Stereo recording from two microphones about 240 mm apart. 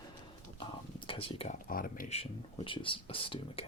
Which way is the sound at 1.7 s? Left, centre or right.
Left.